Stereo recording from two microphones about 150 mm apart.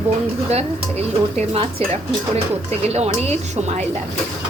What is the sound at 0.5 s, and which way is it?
Speech, 45° right (ahead or behind).